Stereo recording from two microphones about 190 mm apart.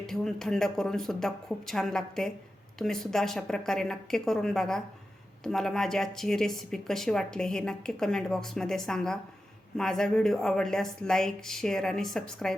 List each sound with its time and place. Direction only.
0.0 s speech: centre (ahead or behind)